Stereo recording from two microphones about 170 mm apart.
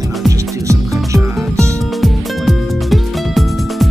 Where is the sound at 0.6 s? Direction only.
20° right (ahead or behind).